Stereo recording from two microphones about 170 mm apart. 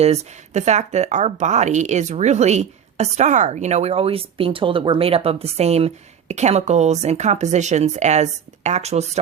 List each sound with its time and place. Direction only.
0.0 s speech: 40° right (ahead or behind)